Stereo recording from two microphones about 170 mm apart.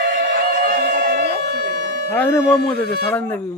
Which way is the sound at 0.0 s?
90° right.